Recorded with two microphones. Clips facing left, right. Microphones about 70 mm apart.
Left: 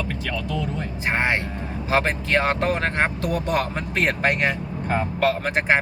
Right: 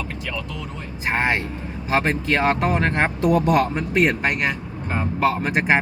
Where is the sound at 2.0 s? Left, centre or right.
Centre.